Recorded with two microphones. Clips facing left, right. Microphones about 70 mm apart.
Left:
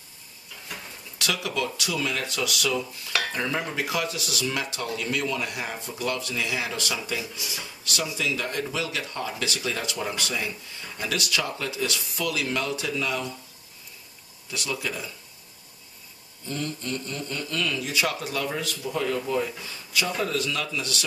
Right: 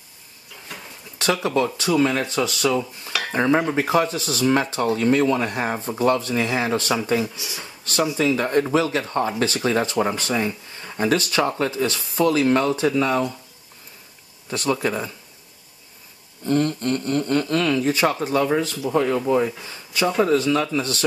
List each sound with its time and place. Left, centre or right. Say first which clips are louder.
1.1 s speech: right 8 dB; right
14.5 s speech: right 9 dB; right
16.4 s speech: right 11 dB; right
19.6 s a sound: right 5 dB; right
20.2 s speech: right 9 dB; right